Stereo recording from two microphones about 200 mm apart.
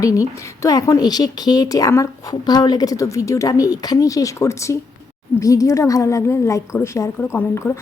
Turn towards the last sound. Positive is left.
turn(degrees=10)  # may be behind; listen again after turning